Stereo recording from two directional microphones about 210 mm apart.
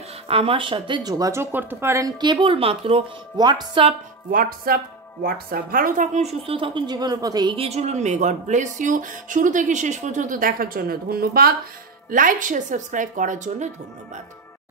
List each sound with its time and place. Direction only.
0.3 s speech: 25° right (ahead or behind)
4.3 s a woman's voice: 45° right (ahead or behind)